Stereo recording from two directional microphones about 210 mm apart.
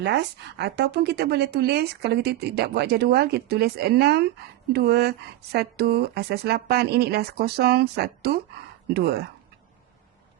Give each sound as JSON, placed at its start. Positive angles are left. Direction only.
{"t": 0.0, "sound": "a woman's voice", "side_deg": -55}